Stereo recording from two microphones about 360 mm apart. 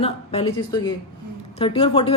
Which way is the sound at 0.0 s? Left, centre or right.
Centre.